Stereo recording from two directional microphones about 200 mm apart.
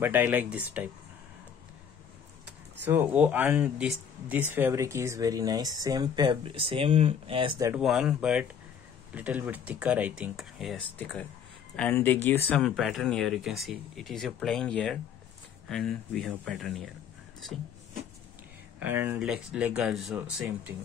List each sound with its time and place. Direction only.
0.0 s speech: 10° right (ahead or behind)
2.4 s speech: 10° right (ahead or behind)
7.7 s speech: 5° right (ahead or behind)
18.8 s speech: 10° right (ahead or behind)